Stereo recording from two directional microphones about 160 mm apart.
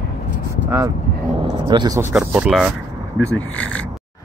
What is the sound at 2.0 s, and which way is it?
Speech, 10° right (ahead or behind).